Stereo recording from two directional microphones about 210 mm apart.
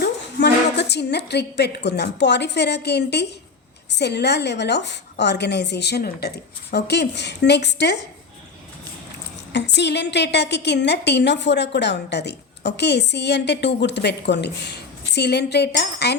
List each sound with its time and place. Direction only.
0.0 s a woman's voice: 55° left (ahead or behind)
9.5 s a woman's voice: 55° left (ahead or behind)